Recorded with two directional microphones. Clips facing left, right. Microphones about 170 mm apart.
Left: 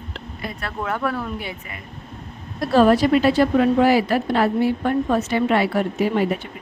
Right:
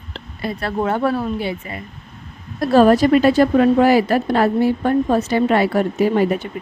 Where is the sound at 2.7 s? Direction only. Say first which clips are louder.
Right 3 dB; 45° right (ahead or behind).